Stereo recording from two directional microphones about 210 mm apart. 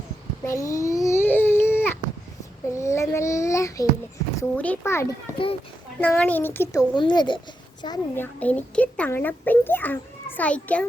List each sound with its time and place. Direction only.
0.4 s babbling: 15° left (ahead or behind)
2.7 s child singing: 15° left (ahead or behind)
4.4 s a child's voice: 10° left (ahead or behind)